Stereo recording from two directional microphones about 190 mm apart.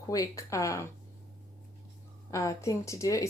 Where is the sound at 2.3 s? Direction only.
15° left (ahead or behind).